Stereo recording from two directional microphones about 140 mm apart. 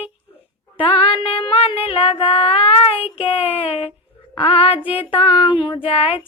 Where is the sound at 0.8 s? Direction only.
40° left (ahead or behind).